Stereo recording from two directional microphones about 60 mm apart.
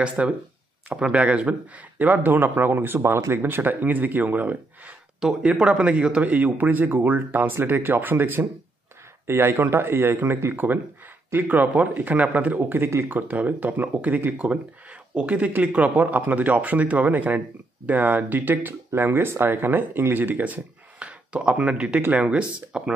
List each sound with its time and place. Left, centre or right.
0.2 s a man's voice: right
6.3 s speech: right
13.3 s a man's voice: right